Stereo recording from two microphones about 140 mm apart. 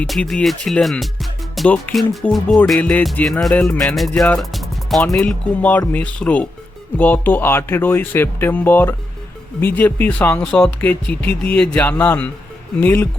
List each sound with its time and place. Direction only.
0.0 s speech: 5° left (ahead or behind)